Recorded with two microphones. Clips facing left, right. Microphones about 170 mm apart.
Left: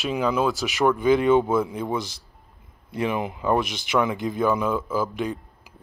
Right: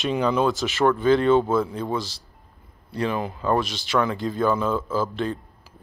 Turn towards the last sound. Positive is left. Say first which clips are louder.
# right 1 dB
turn(degrees=15)  # may be behind; listen again after turning